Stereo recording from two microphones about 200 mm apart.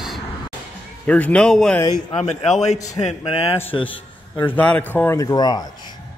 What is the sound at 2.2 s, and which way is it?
Speech, 35° left (ahead or behind).